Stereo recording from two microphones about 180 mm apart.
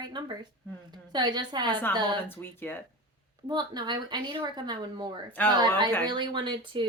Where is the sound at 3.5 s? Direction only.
25° right (ahead or behind).